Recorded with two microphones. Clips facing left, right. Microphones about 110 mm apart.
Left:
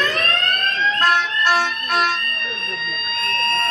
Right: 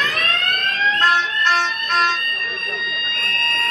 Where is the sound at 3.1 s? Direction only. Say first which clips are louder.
Left 4 dB; 25° left (ahead or behind).